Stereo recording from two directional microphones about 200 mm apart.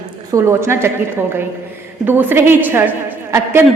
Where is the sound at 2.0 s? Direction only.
10° right (ahead or behind).